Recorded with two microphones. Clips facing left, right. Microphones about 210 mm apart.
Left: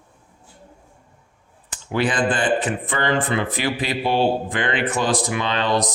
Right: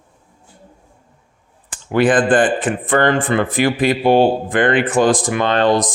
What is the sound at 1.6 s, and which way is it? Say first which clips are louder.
A man's voice: right 7 dB; 50° right (ahead or behind).